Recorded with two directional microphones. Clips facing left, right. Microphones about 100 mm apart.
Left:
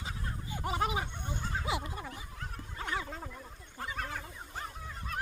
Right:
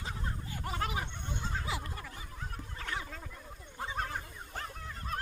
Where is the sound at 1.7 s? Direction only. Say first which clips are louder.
Left 3 dB; 15° left (ahead or behind).